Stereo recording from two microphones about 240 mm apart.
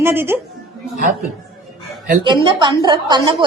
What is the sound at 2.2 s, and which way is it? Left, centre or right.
A woman's voice, centre.